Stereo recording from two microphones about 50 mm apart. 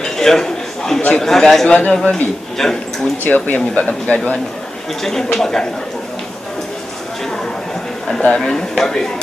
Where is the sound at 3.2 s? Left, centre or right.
Left.